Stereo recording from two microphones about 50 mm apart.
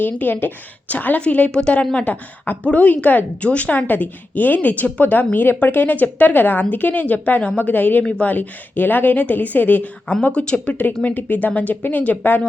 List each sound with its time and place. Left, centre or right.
0.0 s a woman's voice: left
8.0 s a woman's voice: left
11.0 s a woman's voice: left